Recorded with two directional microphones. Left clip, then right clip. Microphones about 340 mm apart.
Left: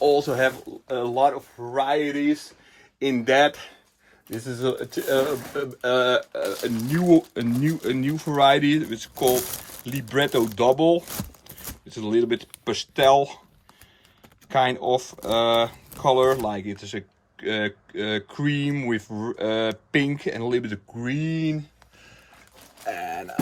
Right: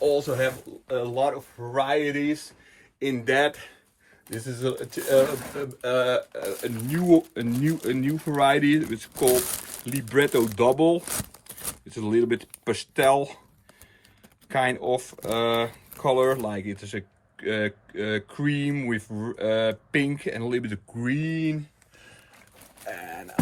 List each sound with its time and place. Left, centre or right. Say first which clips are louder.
0.0 s speech: left 3 dB; centre
14.5 s speech: left 3 dB; centre
22.9 s a sound: left 7 dB; left